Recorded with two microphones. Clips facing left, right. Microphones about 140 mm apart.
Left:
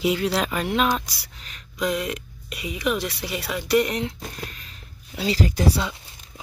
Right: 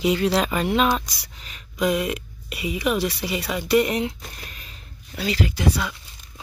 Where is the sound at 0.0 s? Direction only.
5° left (ahead or behind).